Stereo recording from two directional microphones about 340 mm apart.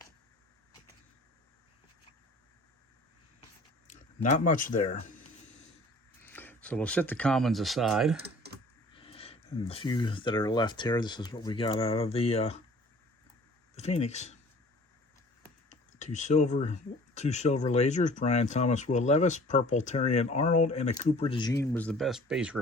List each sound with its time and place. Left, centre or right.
3.8 s speech: left
6.2 s speech: centre
9.0 s speech: centre
13.7 s speech: centre
15.7 s speech: left; by 22.6 s centre